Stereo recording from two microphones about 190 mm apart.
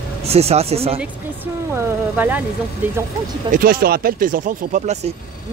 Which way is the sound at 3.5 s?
50° right (ahead or behind).